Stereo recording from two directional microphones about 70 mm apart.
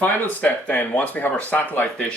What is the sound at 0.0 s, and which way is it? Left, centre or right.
Speech, left.